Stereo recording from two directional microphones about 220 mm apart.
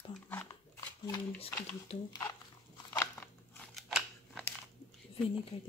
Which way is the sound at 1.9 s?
25° left (ahead or behind).